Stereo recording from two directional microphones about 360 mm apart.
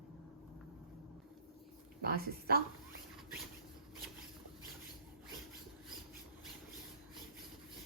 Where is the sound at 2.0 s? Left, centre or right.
Right.